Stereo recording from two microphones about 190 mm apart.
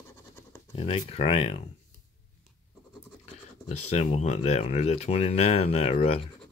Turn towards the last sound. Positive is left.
turn(degrees=30)  # may be behind; listen again after turning